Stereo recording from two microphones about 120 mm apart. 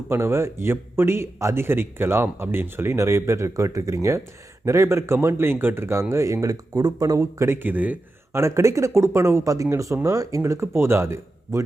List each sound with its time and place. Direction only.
0.1 s speech: 20° right (ahead or behind)